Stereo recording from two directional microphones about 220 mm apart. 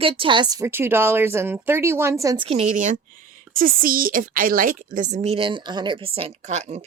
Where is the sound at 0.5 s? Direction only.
10° right (ahead or behind).